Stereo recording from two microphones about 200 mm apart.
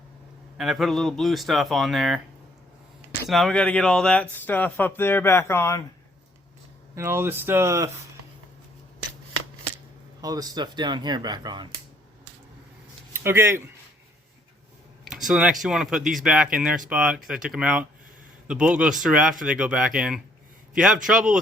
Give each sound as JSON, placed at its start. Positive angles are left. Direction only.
{"t": 0.5, "sound": "speech", "side_deg": 0}
{"t": 3.2, "sound": "speech", "side_deg": 0}
{"t": 6.9, "sound": "speech", "side_deg": -10}
{"t": 10.2, "sound": "speech", "side_deg": -20}
{"t": 13.1, "sound": "speech", "side_deg": -10}
{"t": 15.0, "sound": "speech", "side_deg": 0}